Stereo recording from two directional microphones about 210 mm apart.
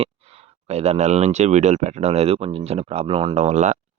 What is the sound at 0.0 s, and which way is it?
Speech, 30° right (ahead or behind).